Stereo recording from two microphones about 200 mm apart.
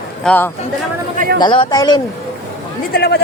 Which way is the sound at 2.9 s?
55° left (ahead or behind).